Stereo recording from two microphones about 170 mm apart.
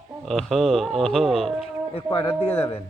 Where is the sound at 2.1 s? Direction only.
35° left (ahead or behind).